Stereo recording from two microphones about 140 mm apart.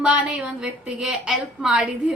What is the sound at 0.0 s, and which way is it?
A woman's voice, 5° right (ahead or behind).